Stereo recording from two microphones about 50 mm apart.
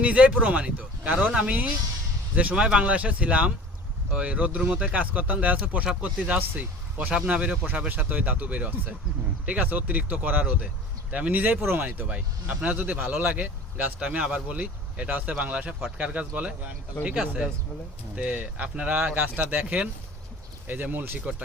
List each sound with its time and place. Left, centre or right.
0.0 s speech: right
2.6 s speech: right
11.6 s speech: right
11.9 s speech: right
12.7 s speech: right
13.4 s speech: right; by 17.5 s centre
18.2 s speech: right
18.9 s speech: right